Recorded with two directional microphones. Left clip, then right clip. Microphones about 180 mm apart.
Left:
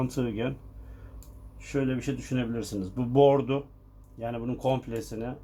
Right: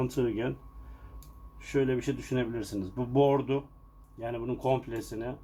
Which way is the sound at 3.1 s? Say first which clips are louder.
Left 4 dB; 30° left (ahead or behind).